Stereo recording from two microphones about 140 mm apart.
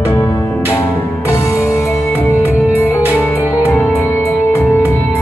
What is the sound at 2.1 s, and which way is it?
Music, 15° right (ahead or behind).